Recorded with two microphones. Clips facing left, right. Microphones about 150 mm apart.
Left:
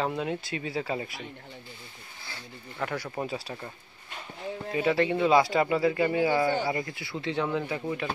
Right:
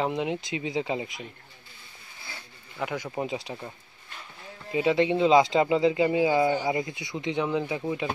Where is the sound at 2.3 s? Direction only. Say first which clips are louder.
Even; 15° right (ahead or behind).